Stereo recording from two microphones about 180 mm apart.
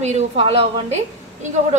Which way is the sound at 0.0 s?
40° right (ahead or behind).